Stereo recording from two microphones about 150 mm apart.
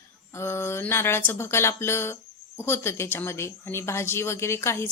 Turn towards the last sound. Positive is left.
turn(degrees=20)  # may be behind; listen again after turning